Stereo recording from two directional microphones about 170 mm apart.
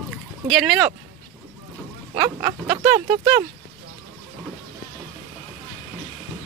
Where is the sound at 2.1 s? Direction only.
25° right (ahead or behind).